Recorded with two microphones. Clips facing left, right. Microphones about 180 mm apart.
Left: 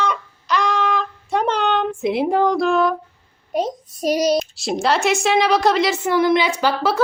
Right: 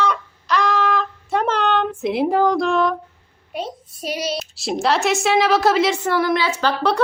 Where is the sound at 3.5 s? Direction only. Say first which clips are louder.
Left 6 dB; 40° left (ahead or behind).